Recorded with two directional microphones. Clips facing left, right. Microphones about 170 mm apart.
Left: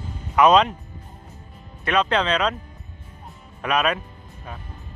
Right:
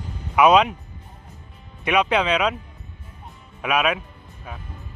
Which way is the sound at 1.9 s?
10° right (ahead or behind).